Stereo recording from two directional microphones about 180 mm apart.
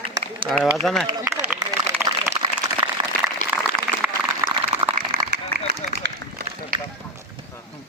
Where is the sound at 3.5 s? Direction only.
10° right (ahead or behind).